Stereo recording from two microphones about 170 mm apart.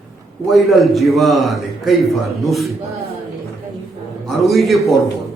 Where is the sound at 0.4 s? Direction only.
Centre (ahead or behind).